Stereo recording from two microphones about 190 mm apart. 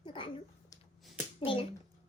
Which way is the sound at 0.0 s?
25° left (ahead or behind).